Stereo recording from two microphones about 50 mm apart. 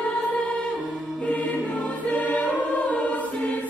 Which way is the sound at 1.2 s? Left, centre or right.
Left.